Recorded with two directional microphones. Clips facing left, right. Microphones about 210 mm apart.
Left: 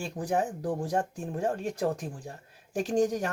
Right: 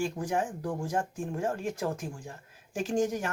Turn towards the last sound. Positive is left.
turn(degrees=35)  # may be behind; listen again after turning